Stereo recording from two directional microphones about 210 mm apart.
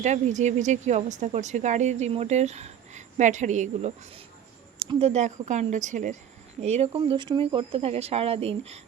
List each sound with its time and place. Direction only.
0.0 s speech: 35° right (ahead or behind)